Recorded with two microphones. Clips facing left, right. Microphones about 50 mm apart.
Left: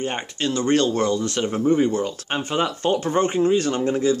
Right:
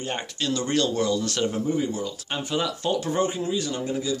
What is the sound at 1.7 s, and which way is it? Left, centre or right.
Speech, left.